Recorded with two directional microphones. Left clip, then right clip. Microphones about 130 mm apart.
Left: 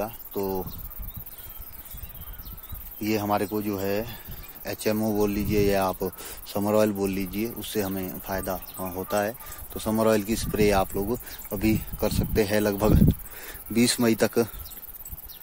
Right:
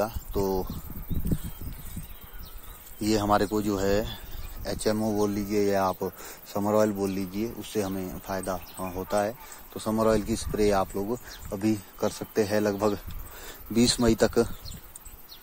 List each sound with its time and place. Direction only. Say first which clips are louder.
0.0 s speech: right 2 dB; 5° right (ahead or behind)
3.0 s speech: right 2 dB; 5° right (ahead or behind)
4.6 s speech: even; 15° left (ahead or behind)
4.9 s speech: left 2 dB; 30° left (ahead or behind)
13.4 s speech: right 1 dB; 20° left (ahead or behind)